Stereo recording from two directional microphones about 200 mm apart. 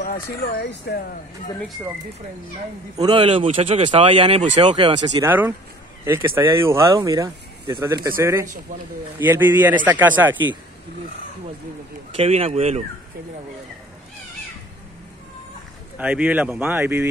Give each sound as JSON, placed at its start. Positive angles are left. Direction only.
{"t": 0.6, "sound": "speech", "side_deg": 55}
{"t": 3.0, "sound": "speech", "side_deg": -25}
{"t": 12.2, "sound": "speech", "side_deg": -30}
{"t": 16.0, "sound": "speech", "side_deg": -5}